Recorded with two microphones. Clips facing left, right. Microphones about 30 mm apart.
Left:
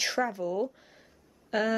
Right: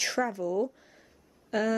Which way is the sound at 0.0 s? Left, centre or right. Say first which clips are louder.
Even; centre.